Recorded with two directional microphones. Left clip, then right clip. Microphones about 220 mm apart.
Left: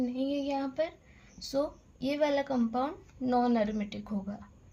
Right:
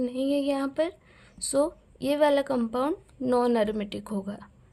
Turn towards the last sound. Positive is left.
turn(degrees=-35)  # may be behind; listen again after turning